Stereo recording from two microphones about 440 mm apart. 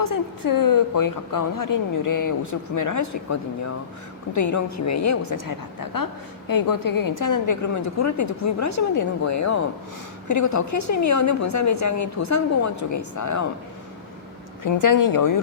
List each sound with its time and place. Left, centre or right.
0.0 s a woman's voice: left
4.4 s a woman's voice: left
14.6 s a woman's voice: left